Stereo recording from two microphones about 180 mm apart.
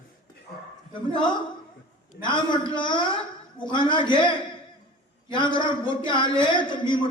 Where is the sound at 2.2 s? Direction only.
25° left (ahead or behind).